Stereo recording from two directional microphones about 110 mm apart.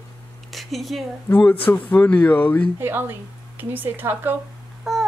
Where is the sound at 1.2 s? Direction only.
15° left (ahead or behind).